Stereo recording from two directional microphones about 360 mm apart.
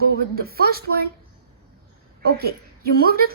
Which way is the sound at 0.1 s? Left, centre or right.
Right.